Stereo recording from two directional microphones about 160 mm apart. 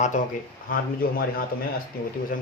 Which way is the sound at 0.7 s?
65° left (ahead or behind).